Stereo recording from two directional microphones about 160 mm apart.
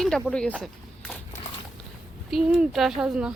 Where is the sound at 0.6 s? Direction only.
5° left (ahead or behind).